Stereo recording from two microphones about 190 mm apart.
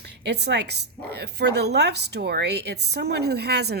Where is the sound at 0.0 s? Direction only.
60° right (ahead or behind).